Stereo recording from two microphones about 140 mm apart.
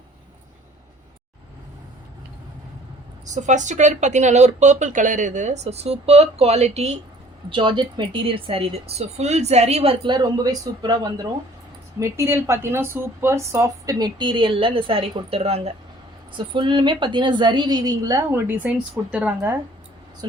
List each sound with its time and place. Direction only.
3.2 s speech: 60° right (ahead or behind)
7.5 s speech: 35° right (ahead or behind)
16.4 s speech: 35° right (ahead or behind); by 19.1 s 20° right (ahead or behind)